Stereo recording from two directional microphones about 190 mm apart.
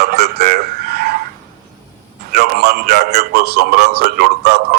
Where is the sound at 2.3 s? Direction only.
55° right (ahead or behind).